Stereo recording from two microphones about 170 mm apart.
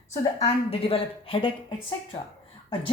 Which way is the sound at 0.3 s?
35° left (ahead or behind).